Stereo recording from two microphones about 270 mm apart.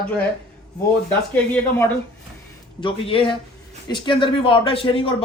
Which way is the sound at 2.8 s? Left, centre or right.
Centre.